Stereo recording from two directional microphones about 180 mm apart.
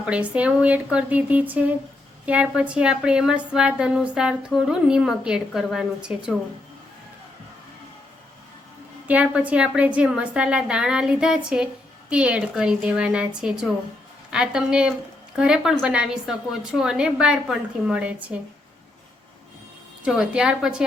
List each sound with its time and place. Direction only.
0.0 s a woman's voice: 5° right (ahead or behind)
9.0 s a woman's voice: 10° right (ahead or behind)
20.1 s a woman's voice: 5° right (ahead or behind)